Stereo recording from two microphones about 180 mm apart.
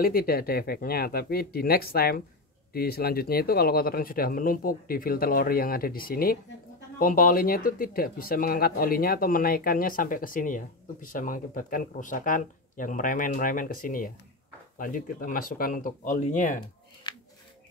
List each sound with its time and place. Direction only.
0.0 s speech: 55° left (ahead or behind)